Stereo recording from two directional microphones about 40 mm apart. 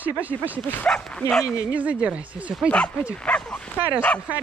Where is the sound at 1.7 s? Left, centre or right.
Right.